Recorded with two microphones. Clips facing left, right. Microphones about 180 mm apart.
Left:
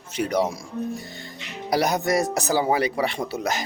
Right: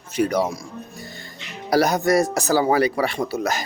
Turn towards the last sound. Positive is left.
turn(degrees=20)  # may be behind; listen again after turning